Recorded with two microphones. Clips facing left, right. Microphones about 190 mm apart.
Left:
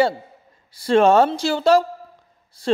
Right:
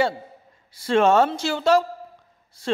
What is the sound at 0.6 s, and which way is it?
A man's voice, 35° left (ahead or behind).